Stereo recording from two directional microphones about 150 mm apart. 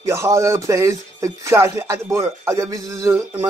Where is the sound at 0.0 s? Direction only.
20° right (ahead or behind).